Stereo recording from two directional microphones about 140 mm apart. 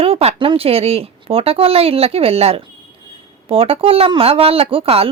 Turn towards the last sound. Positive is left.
turn(degrees=-45)  # may be behind; listen again after turning